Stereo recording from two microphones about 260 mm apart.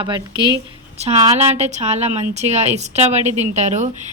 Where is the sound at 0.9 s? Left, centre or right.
Right.